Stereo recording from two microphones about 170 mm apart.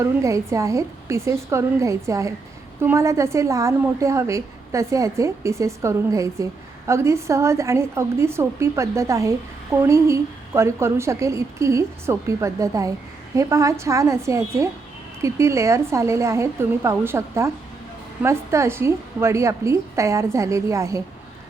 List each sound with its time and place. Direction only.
0.0 s a woman's voice: 20° right (ahead or behind)